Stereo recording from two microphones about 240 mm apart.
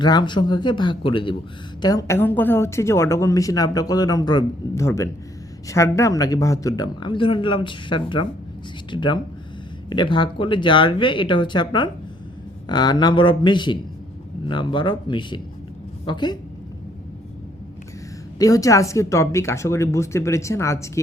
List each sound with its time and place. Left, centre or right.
0.0 s a woman's voice: centre
18.3 s a woman's voice: centre